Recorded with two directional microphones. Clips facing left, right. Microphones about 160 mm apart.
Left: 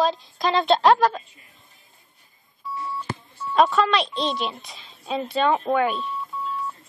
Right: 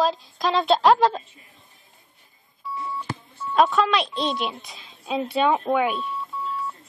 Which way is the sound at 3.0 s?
Centre (ahead or behind).